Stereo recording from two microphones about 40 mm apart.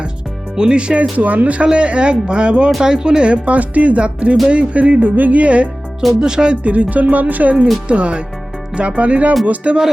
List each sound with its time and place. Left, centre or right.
0.5 s speech: right
1.1 s music: right
1.6 s speech: right
4.4 s music: right
5.4 s music: right
6.1 s music: centre
6.6 s music: right
7.9 s speech: right
8.7 s music: right